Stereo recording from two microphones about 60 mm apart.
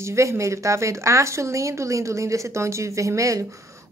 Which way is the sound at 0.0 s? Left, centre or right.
Right.